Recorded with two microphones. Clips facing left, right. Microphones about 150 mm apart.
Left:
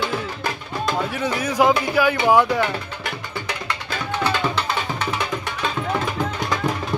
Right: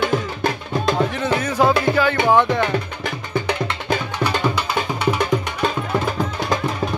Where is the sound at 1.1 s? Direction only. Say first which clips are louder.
Right 1 dB; 10° left (ahead or behind).